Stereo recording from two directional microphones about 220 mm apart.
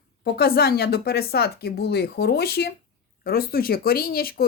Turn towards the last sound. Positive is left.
turn(degrees=45)  # may be behind; listen again after turning